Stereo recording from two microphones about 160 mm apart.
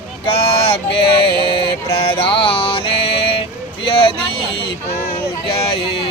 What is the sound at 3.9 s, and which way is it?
Vehicle, 35° left (ahead or behind).